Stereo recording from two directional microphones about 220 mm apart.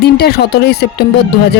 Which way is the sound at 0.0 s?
45° left (ahead or behind).